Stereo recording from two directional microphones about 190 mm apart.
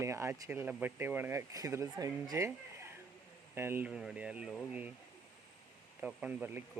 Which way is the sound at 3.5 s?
10° right (ahead or behind).